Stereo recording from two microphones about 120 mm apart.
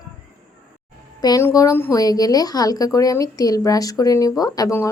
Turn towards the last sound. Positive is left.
turn(degrees=30)  # may be behind; listen again after turning